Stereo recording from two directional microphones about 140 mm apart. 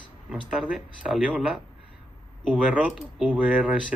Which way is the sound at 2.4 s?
10° right (ahead or behind).